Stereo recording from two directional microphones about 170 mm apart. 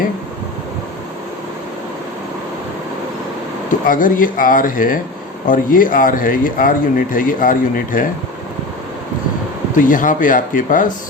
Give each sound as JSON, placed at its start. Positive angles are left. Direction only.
{"t": 3.7, "sound": "speech", "side_deg": 50}
{"t": 9.7, "sound": "speech", "side_deg": 50}